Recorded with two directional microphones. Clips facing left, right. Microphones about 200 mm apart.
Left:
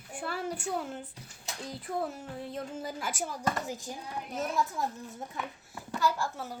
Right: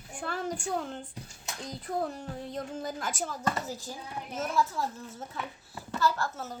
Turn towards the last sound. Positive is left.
turn(degrees=10)  # may be behind; listen again after turning